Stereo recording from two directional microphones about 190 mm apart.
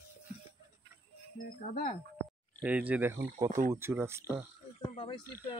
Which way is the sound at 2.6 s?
5° right (ahead or behind).